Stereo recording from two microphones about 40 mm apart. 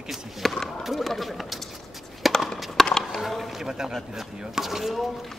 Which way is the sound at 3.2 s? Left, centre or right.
Centre.